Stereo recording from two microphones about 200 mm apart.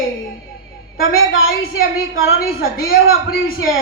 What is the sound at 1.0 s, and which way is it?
A woman's voice, 90° left.